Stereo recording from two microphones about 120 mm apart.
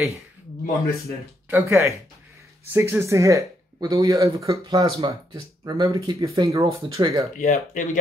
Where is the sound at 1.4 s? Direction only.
15° right (ahead or behind).